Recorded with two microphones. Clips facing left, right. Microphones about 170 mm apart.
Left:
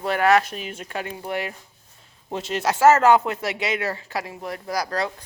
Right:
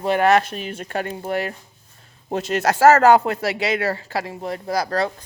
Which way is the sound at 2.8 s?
35° right (ahead or behind).